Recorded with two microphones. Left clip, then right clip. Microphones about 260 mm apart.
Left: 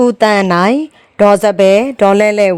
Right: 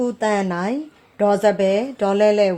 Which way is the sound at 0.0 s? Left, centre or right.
Left.